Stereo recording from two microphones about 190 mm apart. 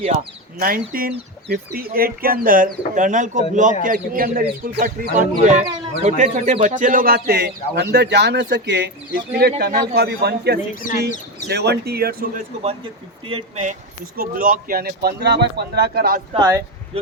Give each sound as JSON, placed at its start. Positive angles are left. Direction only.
{"t": 0.9, "sound": "a man's voice", "side_deg": -50}
{"t": 14.2, "sound": "speech", "side_deg": -50}
{"t": 16.3, "sound": "speech", "side_deg": -25}